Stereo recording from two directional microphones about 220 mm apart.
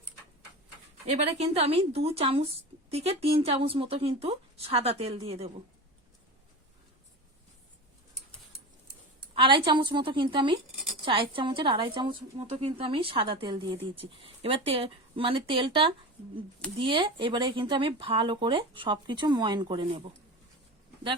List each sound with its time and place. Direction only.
1.1 s speech: 30° right (ahead or behind)
9.3 s speech: 20° right (ahead or behind)